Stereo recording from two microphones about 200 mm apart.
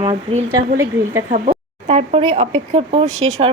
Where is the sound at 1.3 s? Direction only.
35° right (ahead or behind).